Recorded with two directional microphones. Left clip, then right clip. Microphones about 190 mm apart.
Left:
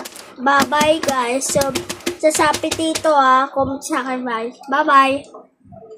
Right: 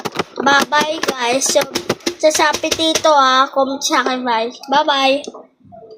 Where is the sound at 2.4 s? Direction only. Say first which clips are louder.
Right 2 dB; 20° left (ahead or behind).